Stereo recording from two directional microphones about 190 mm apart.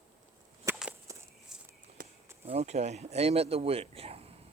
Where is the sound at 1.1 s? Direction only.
15° right (ahead or behind).